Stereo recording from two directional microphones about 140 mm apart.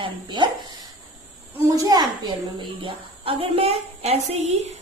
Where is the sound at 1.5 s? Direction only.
20° right (ahead or behind).